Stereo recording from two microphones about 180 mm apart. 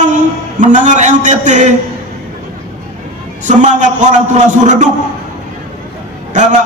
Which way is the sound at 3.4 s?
45° right (ahead or behind).